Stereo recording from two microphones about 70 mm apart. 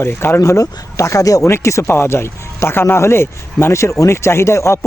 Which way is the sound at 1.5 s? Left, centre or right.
Left.